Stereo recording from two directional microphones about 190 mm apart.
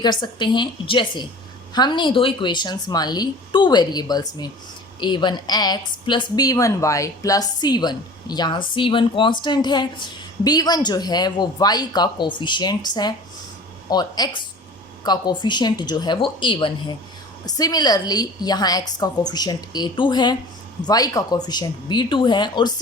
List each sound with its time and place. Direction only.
0.0 s speech: 25° left (ahead or behind)